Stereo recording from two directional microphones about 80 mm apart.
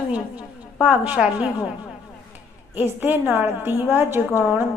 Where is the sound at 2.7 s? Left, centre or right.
Right.